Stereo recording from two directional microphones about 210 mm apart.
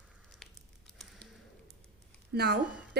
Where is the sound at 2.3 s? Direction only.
50° right (ahead or behind).